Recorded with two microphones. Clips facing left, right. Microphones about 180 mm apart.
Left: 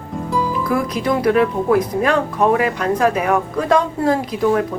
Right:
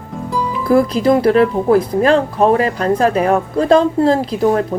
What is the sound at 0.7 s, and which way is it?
Speech, 35° right (ahead or behind).